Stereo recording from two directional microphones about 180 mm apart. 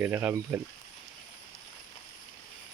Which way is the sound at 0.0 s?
10° right (ahead or behind).